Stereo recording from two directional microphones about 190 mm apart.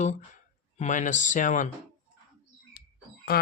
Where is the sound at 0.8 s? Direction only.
40° left (ahead or behind).